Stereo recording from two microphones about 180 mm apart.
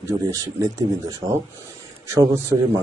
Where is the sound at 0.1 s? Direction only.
20° right (ahead or behind).